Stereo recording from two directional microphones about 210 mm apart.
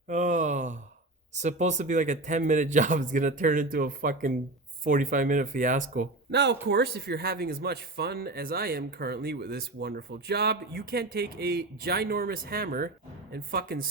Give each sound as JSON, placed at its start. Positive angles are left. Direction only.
{"t": 0.1, "sound": "a sound", "side_deg": -35}
{"t": 1.4, "sound": "a man's voice", "side_deg": -35}
{"t": 6.3, "sound": "speech", "side_deg": -55}